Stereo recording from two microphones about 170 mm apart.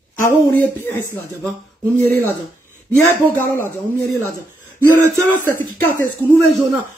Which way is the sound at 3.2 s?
15° left (ahead or behind).